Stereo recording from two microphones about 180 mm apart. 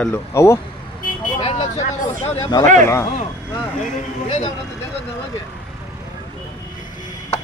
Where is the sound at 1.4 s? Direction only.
35° left (ahead or behind).